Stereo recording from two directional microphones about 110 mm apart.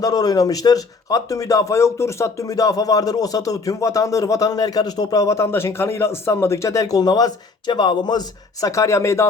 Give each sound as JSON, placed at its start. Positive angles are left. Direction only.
{"t": 0.0, "sound": "speech", "side_deg": 35}
{"t": 8.6, "sound": "speech", "side_deg": 30}